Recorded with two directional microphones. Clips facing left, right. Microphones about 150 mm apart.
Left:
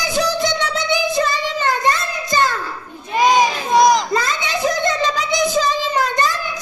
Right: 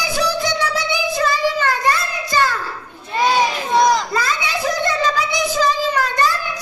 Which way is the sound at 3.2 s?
15° left (ahead or behind).